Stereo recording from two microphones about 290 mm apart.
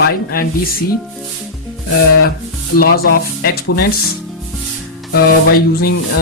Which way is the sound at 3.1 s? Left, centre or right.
Left.